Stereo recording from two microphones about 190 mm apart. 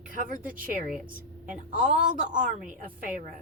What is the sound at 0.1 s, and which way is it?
A woman's voice, 45° right (ahead or behind).